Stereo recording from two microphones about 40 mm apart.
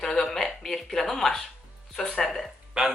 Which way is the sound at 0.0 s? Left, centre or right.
Centre.